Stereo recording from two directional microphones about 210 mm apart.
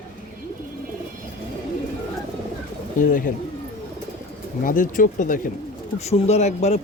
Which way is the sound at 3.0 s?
40° left (ahead or behind).